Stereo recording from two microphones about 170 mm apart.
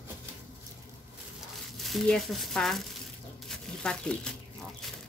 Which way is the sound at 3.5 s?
5° left (ahead or behind).